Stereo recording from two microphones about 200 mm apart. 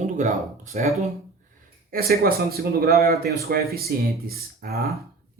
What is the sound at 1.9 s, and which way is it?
A man's voice, 50° right (ahead or behind).